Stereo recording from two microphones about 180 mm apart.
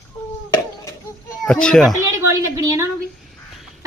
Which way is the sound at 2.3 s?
20° right (ahead or behind).